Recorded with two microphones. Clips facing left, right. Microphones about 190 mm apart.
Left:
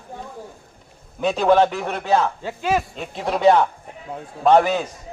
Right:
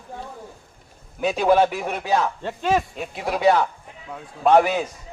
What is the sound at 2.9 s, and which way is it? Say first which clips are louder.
Speech: left 2 dB; 5° right (ahead or behind).